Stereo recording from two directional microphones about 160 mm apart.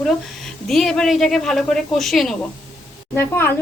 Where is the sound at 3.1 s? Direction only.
15° left (ahead or behind).